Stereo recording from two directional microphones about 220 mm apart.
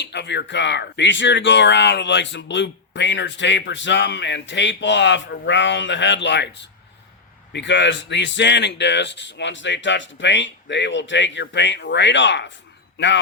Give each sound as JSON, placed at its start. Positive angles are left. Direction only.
{"t": 0.0, "sound": "speech", "side_deg": 50}